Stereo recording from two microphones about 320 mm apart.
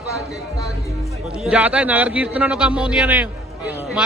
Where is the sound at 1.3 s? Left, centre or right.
Centre.